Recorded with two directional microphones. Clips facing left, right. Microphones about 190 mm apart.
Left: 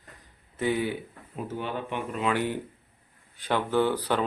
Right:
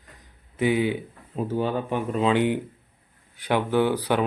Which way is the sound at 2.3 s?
20° right (ahead or behind).